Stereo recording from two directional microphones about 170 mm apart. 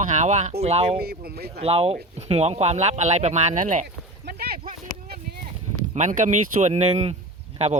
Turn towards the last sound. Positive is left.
turn(degrees=-40)  # may be behind; listen again after turning